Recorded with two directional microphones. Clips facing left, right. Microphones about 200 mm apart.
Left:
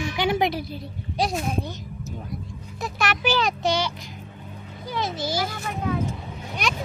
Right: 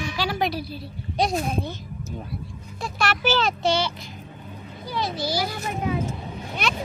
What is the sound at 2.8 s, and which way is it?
A child's voice, 15° left (ahead or behind).